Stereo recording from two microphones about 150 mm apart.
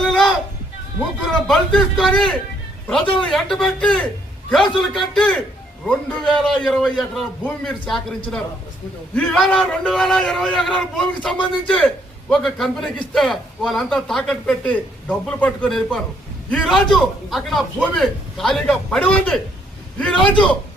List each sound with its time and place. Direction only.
0.0 s a sound: centre (ahead or behind)
1.3 s a man's voice: 5° left (ahead or behind)
20.2 s a man's voice: 30° left (ahead or behind)